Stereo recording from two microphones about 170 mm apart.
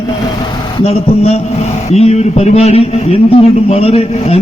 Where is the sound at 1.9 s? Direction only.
40° left (ahead or behind).